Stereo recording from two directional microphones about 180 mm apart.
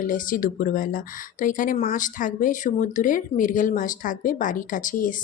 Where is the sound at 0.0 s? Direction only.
50° left (ahead or behind).